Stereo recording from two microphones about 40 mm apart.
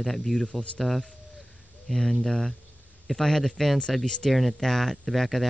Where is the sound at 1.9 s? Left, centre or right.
Centre.